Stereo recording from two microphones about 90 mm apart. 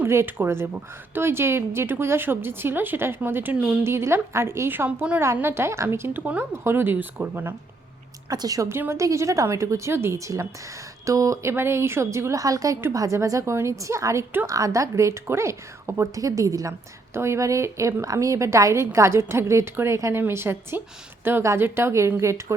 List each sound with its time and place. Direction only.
0.0 s a woman's voice: 25° right (ahead or behind)
4.9 s a woman's voice: 15° right (ahead or behind)
5.2 s a woman's voice: 30° right (ahead or behind)
8.3 s a woman's voice: 45° right (ahead or behind)
8.7 s a woman's voice: 30° right (ahead or behind)